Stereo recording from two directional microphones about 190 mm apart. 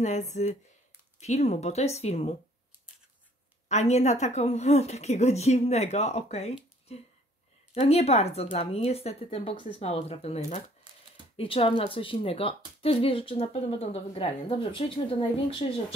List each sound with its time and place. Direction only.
0.0 s a woman's voice: 40° left (ahead or behind)
3.6 s a woman's voice: 35° left (ahead or behind)